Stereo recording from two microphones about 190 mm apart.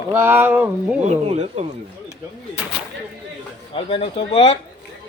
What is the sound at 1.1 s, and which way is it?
Speech, 35° right (ahead or behind).